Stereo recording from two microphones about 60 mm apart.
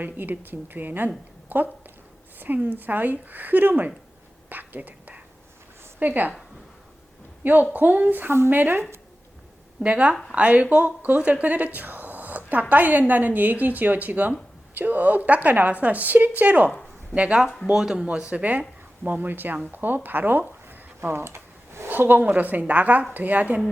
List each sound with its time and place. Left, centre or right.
0.0 s a woman's voice: right
4.4 s whispering: right
6.0 s speech: right
7.4 s a woman's voice: right
9.8 s a woman's voice: right
20.7 s a sound: right
21.8 s speech: right